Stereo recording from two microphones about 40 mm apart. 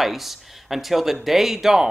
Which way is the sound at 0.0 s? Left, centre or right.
Centre.